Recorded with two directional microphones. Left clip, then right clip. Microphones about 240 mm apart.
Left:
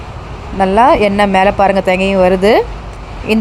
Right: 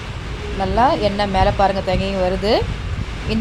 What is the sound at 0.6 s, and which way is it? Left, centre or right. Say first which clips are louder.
Speech: left 8 dB; left.